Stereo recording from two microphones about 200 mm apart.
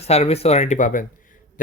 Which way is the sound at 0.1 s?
30° left (ahead or behind).